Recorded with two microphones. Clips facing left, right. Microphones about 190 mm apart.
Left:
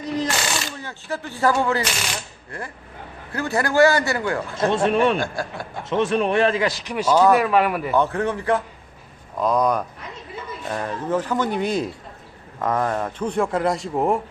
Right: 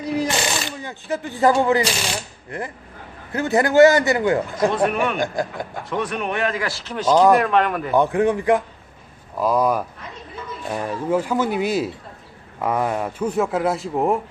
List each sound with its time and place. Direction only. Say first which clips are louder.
0.0 s a sound: right 2 dB; 10° right (ahead or behind)
0.8 s a man's voice: right 3 dB; 15° right (ahead or behind)
4.7 s a man's voice: left 2 dB; 25° left (ahead or behind)
5.2 s a man's voice: right 4 dB; 20° right (ahead or behind)
5.9 s a man's voice: left 5 dB; 25° left (ahead or behind); by 7.9 s 5° left (ahead or behind)
7.9 s a man's voice: right 5 dB; 15° right (ahead or behind)